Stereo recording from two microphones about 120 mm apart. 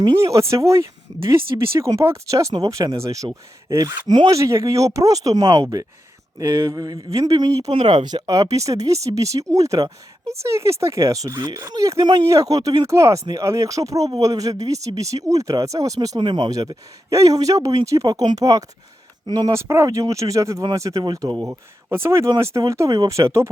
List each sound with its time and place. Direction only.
0.2 s speech: 25° right (ahead or behind)
4.4 s speech: 25° right (ahead or behind)
21.4 s speech: 20° right (ahead or behind)